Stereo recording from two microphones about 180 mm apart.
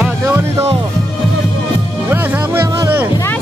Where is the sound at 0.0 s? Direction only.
15° right (ahead or behind).